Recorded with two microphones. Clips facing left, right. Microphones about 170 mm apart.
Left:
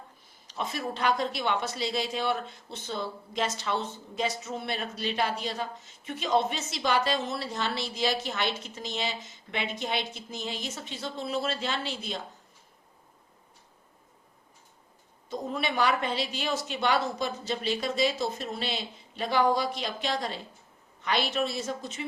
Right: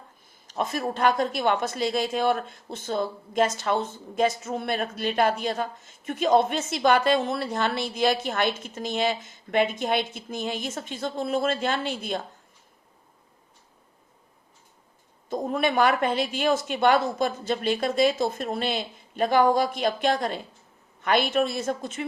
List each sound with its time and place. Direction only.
0.4 s speech: 50° right (ahead or behind)
15.3 s speech: 50° right (ahead or behind)